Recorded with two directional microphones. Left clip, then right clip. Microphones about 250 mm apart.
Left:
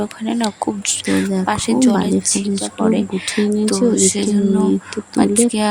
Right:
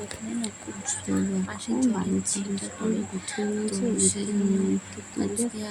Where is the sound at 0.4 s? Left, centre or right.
Left.